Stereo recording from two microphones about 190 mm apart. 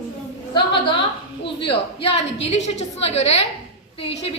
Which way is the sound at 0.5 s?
25° left (ahead or behind).